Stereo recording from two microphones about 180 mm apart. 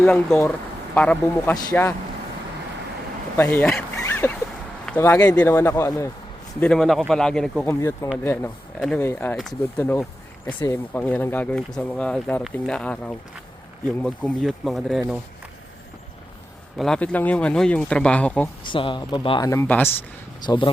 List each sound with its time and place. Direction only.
0.0 s speech: 10° left (ahead or behind)
3.3 s speech: 10° left (ahead or behind)
6.6 s speech: 5° left (ahead or behind)
7.7 s speech: 15° left (ahead or behind)
10.6 s speech: 15° left (ahead or behind)
16.7 s speech: 5° left (ahead or behind)
18.6 s speech: 30° left (ahead or behind)
19.5 s speech: 10° left (ahead or behind)
20.4 s speech: 25° left (ahead or behind)